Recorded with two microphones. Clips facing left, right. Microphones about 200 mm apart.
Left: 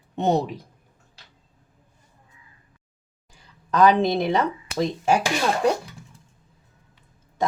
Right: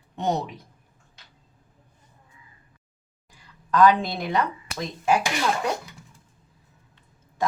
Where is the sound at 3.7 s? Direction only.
20° left (ahead or behind).